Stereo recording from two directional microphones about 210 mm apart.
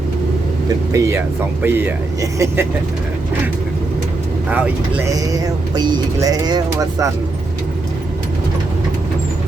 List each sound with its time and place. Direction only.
0.9 s speech: 15° right (ahead or behind)
4.4 s speech: 5° right (ahead or behind)
5.1 s speech: 15° right (ahead or behind)